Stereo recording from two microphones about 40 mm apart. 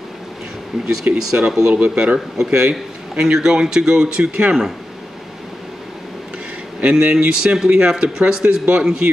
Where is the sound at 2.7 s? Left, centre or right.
Centre.